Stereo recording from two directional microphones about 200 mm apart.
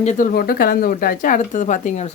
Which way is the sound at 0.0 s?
40° left (ahead or behind).